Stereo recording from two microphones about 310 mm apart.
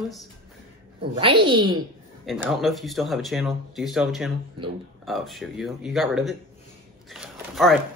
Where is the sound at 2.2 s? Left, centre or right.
Centre.